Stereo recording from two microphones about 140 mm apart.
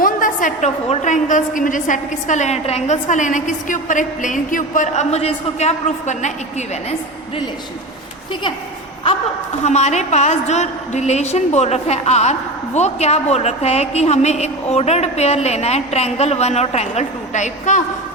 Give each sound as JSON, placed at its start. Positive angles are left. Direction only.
{"t": 0.0, "sound": "a sound", "side_deg": 75}
{"t": 0.9, "sound": "a woman's voice", "side_deg": 60}
{"t": 9.6, "sound": "a woman's voice", "side_deg": 55}